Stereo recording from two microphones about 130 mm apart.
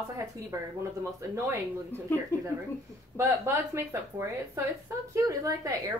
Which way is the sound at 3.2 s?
20° right (ahead or behind).